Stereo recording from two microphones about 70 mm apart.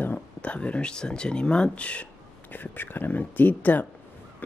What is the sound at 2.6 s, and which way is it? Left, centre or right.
Speech, left.